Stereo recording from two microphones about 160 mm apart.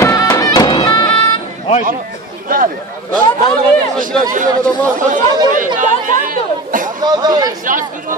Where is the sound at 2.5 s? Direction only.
60° right (ahead or behind).